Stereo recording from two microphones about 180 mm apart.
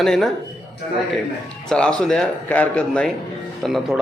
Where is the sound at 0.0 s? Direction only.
Centre (ahead or behind).